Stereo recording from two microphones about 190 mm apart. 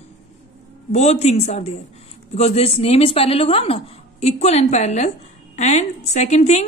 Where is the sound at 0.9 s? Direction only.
35° left (ahead or behind).